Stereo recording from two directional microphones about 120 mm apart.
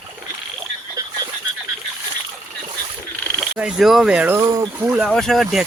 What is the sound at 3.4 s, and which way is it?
Speech, 5° right (ahead or behind).